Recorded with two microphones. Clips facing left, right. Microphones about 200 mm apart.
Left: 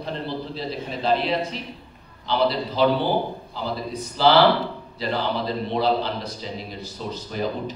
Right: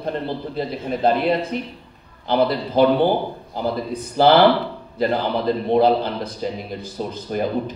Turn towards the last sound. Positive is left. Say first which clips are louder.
# right 5 dB
turn(degrees=-50)  # may be behind; listen again after turning